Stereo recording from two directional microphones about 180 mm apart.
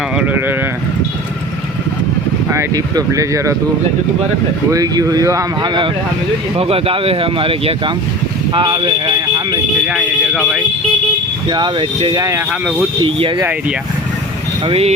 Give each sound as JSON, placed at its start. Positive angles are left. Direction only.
{"t": 0.2, "sound": "speech", "side_deg": -10}
{"t": 2.5, "sound": "speech", "side_deg": -20}
{"t": 4.7, "sound": "speech", "side_deg": -20}
{"t": 9.8, "sound": "speech", "side_deg": -5}
{"t": 11.4, "sound": "speech", "side_deg": -25}
{"t": 13.0, "sound": "speech", "side_deg": -30}
{"t": 13.4, "sound": "speech", "side_deg": -10}
{"t": 14.6, "sound": "speech", "side_deg": -30}